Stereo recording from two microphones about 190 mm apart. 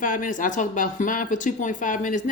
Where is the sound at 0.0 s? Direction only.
45° left (ahead or behind).